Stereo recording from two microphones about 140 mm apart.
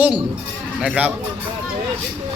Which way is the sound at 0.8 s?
10° right (ahead or behind).